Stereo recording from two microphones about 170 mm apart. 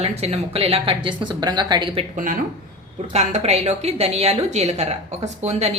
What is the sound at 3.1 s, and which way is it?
A woman's voice, 40° right (ahead or behind).